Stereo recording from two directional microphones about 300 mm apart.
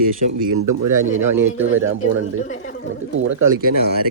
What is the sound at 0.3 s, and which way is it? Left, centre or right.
Speech, right.